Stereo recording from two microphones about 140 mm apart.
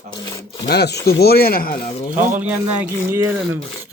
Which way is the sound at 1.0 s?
90° left.